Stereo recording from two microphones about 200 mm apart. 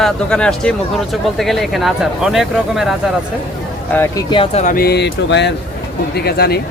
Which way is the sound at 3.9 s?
20° left (ahead or behind).